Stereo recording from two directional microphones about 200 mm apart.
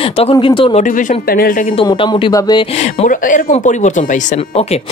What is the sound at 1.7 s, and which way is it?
Speech, 25° left (ahead or behind).